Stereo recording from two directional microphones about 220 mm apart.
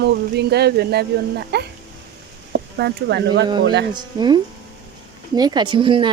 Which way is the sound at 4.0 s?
20° right (ahead or behind).